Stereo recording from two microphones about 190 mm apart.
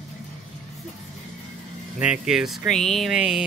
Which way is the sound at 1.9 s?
5° right (ahead or behind).